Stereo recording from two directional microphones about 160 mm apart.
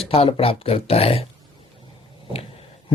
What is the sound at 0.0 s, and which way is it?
Speech, 35° left (ahead or behind).